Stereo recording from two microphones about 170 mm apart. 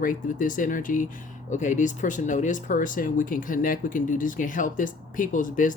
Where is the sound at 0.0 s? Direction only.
50° left (ahead or behind).